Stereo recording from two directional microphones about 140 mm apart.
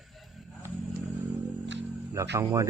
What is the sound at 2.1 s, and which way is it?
Speech, 20° right (ahead or behind).